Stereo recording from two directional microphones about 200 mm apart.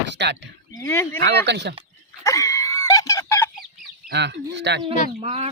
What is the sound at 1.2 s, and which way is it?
Speech, 60° right (ahead or behind).